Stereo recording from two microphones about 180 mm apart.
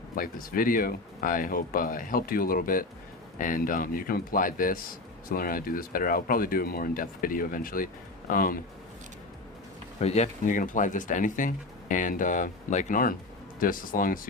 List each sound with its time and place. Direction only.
0.2 s speech: 50° left (ahead or behind)
10.0 s speech: 35° left (ahead or behind)